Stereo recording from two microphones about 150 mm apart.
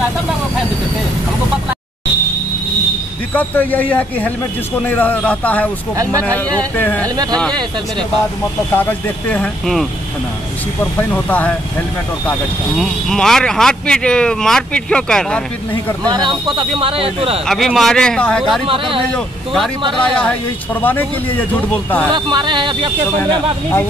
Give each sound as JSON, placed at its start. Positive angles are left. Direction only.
{"t": 3.3, "sound": "speech", "side_deg": 10}
{"t": 6.8, "sound": "speech", "side_deg": 10}
{"t": 8.7, "sound": "speech", "side_deg": 10}
{"t": 12.7, "sound": "speech", "side_deg": 5}
{"t": 16.1, "sound": "speech", "side_deg": -30}
{"t": 17.5, "sound": "speech", "side_deg": 0}
{"t": 18.7, "sound": "speech", "side_deg": -35}
{"t": 19.1, "sound": "speech", "side_deg": 0}
{"t": 19.8, "sound": "speech", "side_deg": -35}
{"t": 20.8, "sound": "speech", "side_deg": 10}
{"t": 22.1, "sound": "speech", "side_deg": -30}